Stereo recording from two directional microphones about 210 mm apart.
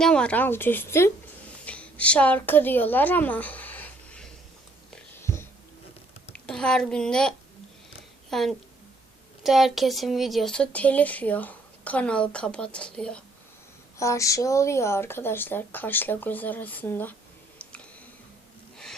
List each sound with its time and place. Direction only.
0.0 s a woman's voice: 5° left (ahead or behind)
5.2 s a sound: 15° left (ahead or behind)
6.3 s a woman's voice: 5° left (ahead or behind)